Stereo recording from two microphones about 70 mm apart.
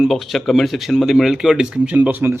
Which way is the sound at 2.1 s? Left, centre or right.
Right.